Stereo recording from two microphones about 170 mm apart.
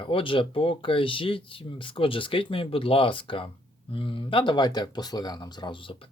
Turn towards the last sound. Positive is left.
turn(degrees=30)  # may be behind; listen again after turning